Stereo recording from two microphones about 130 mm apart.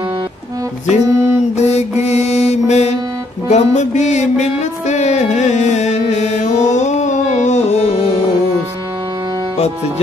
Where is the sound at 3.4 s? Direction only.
65° left (ahead or behind).